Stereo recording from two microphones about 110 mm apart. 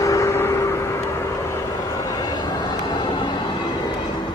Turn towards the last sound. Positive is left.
turn(degrees=45)  # may be behind; listen again after turning